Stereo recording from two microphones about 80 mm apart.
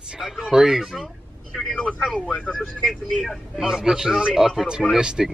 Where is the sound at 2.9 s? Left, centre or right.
Centre.